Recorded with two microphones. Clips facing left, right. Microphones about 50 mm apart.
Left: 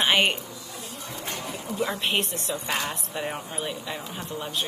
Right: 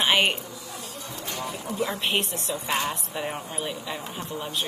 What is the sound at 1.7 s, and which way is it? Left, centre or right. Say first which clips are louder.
Speech: even; centre.